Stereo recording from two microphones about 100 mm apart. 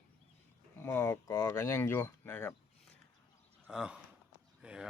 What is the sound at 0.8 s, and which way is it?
Speech, 20° left (ahead or behind).